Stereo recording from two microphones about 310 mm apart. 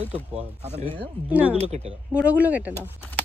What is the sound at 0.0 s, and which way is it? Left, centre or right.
Speech, centre.